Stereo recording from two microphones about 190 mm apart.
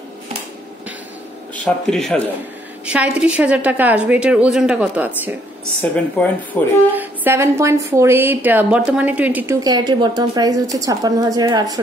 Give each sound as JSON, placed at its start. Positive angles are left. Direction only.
{"t": 1.5, "sound": "a woman's voice", "side_deg": 5}
{"t": 5.8, "sound": "speech", "side_deg": 5}
{"t": 6.9, "sound": "a woman's voice", "side_deg": -10}